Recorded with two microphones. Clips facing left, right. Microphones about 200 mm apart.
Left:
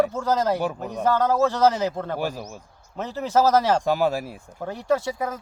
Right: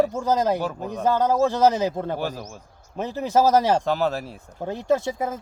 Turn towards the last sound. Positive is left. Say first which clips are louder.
# right 1 dB
turn(degrees=-25)  # may be behind; listen again after turning